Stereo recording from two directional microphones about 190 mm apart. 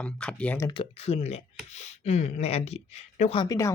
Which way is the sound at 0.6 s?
25° left (ahead or behind).